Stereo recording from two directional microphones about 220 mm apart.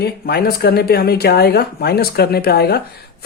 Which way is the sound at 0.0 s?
45° left (ahead or behind).